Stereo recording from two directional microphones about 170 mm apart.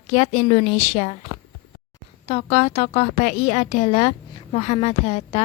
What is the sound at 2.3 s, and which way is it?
A woman's voice, 40° left (ahead or behind).